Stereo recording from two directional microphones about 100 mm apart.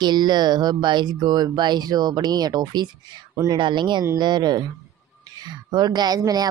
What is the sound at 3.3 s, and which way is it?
Speech, 30° right (ahead or behind).